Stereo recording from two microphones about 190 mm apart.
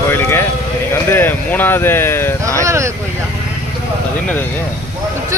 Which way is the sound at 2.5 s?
15° right (ahead or behind).